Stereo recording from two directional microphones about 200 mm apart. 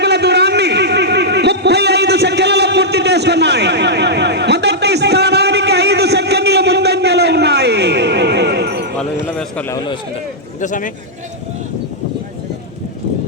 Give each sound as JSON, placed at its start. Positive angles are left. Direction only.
{"t": 0.0, "sound": "a sound", "side_deg": -55}
{"t": 9.0, "sound": "clip-clop", "side_deg": 5}
{"t": 9.7, "sound": "a man's voice", "side_deg": 25}
{"t": 10.6, "sound": "a man's voice", "side_deg": 40}